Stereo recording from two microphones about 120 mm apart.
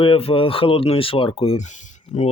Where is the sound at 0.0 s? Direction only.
50° left (ahead or behind).